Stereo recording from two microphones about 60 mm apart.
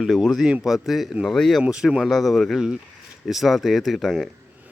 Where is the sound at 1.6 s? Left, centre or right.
Centre.